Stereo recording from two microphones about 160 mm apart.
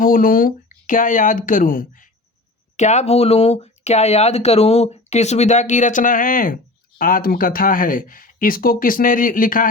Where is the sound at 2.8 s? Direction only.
45° left (ahead or behind).